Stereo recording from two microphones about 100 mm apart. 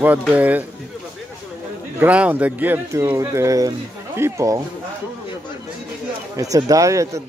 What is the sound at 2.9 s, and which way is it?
A man's voice, 30° right (ahead or behind).